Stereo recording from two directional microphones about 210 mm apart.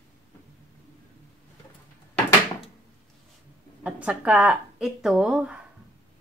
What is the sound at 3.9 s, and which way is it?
A woman's voice, 5° right (ahead or behind).